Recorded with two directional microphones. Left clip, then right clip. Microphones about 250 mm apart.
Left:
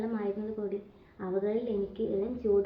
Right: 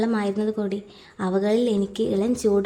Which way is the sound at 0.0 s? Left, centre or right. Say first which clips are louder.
Right 10 dB; right.